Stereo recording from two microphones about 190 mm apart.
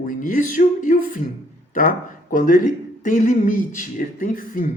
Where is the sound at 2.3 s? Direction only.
45° left (ahead or behind).